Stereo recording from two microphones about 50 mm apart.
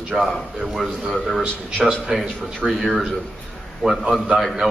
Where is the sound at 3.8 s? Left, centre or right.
Centre.